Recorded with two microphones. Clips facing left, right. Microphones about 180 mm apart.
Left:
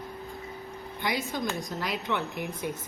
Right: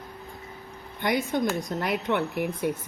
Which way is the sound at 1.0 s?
55° right (ahead or behind).